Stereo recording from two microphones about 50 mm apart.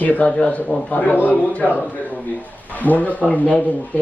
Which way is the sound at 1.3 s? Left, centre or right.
Left.